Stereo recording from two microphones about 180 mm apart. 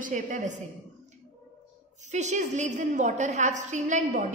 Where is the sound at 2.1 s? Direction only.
40° right (ahead or behind).